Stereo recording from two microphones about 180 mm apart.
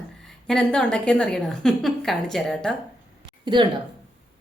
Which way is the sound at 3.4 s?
25° right (ahead or behind).